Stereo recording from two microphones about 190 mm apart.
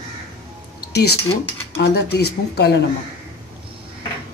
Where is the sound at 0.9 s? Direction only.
60° left (ahead or behind).